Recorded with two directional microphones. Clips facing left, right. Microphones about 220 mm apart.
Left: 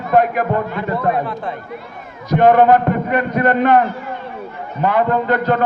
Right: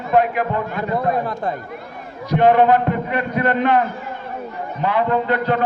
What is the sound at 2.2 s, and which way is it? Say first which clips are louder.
A man's voice: left 3 dB; 45° left (ahead or behind).